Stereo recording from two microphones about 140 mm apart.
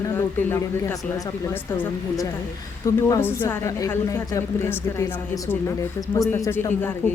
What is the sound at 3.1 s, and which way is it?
A woman's voice, 20° left (ahead or behind).